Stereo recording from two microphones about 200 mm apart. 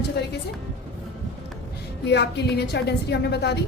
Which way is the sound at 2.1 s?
55° left (ahead or behind).